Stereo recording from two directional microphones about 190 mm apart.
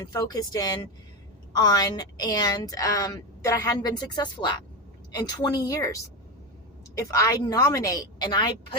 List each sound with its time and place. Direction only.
0.0 s a woman's voice: 20° left (ahead or behind)